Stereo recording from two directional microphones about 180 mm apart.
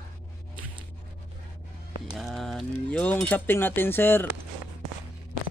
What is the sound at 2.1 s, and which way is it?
Speech, centre (ahead or behind).